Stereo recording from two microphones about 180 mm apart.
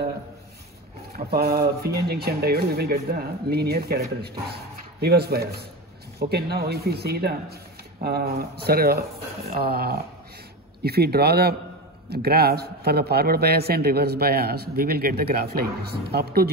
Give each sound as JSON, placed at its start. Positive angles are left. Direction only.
{"t": 1.1, "sound": "a man's voice", "side_deg": -60}